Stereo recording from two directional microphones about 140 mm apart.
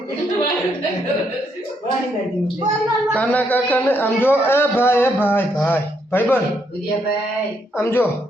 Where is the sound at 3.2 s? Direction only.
10° left (ahead or behind).